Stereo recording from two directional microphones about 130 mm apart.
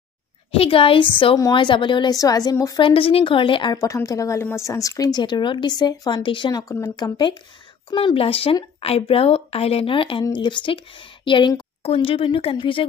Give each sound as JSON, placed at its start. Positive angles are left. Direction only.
{"t": 0.5, "sound": "a woman's voice", "side_deg": 45}
{"t": 2.8, "sound": "a woman's voice", "side_deg": 45}
{"t": 3.7, "sound": "a woman's voice", "side_deg": 25}